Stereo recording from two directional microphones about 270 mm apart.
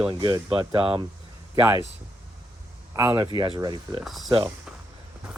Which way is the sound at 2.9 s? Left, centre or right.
Centre.